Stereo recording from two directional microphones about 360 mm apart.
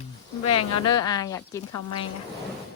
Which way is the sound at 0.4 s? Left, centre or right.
Left.